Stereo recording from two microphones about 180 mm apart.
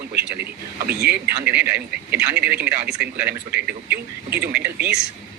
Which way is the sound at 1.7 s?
65° right (ahead or behind).